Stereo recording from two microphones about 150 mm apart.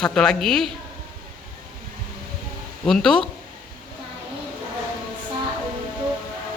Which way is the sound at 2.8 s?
5° left (ahead or behind).